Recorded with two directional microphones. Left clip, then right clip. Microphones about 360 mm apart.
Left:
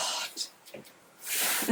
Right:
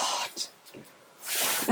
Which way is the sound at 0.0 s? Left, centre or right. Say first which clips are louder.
Right 3 dB; centre.